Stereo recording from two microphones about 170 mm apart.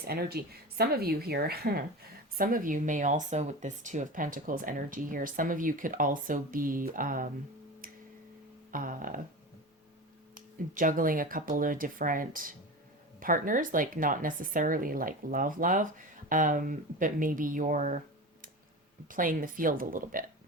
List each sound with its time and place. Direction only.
0.1 s speech: 65° right (ahead or behind)
2.4 s speech: 55° right (ahead or behind)
7.8 s tick-tock: 55° right (ahead or behind)
8.7 s speech: 55° right (ahead or behind)
10.3 s speech: 50° right (ahead or behind)
19.0 s speech: 55° right (ahead or behind)